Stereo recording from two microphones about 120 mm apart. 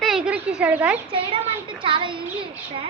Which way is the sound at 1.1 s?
50° right (ahead or behind).